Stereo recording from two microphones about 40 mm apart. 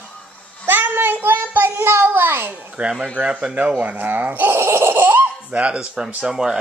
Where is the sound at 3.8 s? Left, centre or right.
Right.